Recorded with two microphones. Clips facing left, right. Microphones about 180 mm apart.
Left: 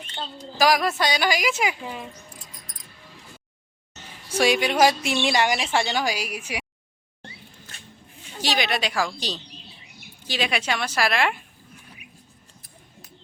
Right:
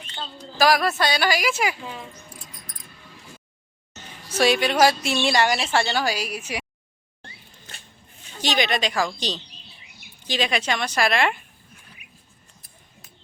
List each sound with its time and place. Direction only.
0.6 s a woman's voice: 15° left (ahead or behind)
4.4 s a woman's voice: 10° left (ahead or behind)
8.4 s speech: 5° left (ahead or behind)